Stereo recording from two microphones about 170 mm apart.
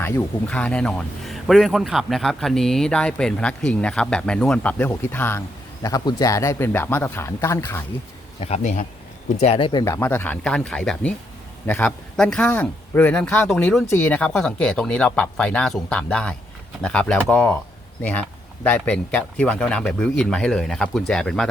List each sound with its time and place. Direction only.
0.0 s a man's voice: 10° left (ahead or behind)
8.4 s speech: 40° left (ahead or behind)
9.4 s speech: 35° left (ahead or behind)
9.8 s speech: 15° left (ahead or behind)
18.6 s a man's voice: 10° left (ahead or behind)